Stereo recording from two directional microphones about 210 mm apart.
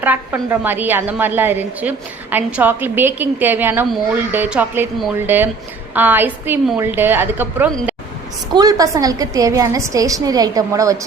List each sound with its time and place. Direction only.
0.0 s a woman's voice: 10° right (ahead or behind)